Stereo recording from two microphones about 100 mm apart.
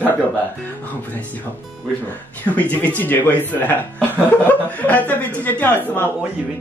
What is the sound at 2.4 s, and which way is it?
Speech, 15° left (ahead or behind).